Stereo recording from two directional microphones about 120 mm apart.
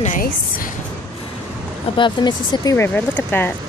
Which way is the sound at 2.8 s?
15° left (ahead or behind).